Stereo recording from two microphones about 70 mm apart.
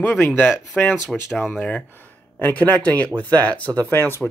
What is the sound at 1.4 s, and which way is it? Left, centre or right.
Speech, left.